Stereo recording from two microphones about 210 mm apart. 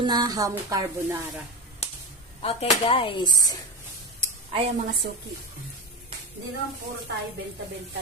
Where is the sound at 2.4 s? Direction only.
30° left (ahead or behind).